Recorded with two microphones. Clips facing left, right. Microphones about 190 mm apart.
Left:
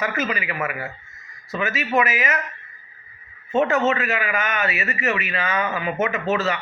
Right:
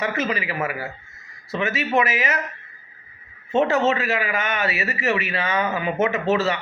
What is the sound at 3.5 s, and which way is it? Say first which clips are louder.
A man's voice: even; 30° right (ahead or behind).